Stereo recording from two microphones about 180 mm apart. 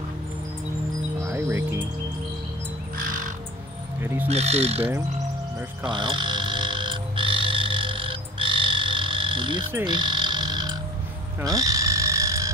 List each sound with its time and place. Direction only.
1.1 s music: 15° right (ahead or behind)
3.0 s bird: 50° right (ahead or behind)
4.0 s music: 15° right (ahead or behind)
4.3 s speech: 35° right (ahead or behind)
5.9 s frog: 25° right (ahead or behind)